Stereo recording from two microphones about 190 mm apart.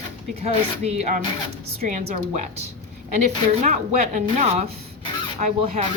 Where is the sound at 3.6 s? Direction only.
40° right (ahead or behind).